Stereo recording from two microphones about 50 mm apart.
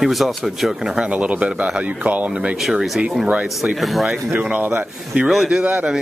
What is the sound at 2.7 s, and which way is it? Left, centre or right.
Speech, centre.